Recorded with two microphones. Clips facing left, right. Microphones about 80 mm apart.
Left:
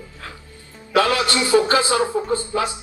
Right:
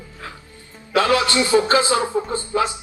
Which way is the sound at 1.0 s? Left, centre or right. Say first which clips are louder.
Right 2 dB; right.